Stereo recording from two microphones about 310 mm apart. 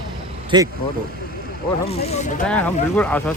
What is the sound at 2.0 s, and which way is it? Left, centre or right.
Speech, left.